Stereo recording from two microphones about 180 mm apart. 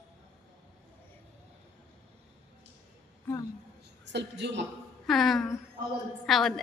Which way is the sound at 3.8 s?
70° right (ahead or behind).